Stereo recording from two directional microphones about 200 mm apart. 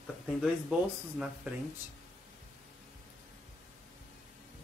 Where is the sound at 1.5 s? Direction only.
10° right (ahead or behind).